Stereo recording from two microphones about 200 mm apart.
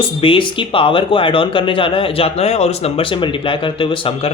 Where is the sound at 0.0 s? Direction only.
25° left (ahead or behind).